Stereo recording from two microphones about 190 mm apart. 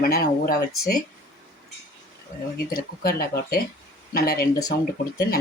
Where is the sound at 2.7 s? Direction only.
50° left (ahead or behind).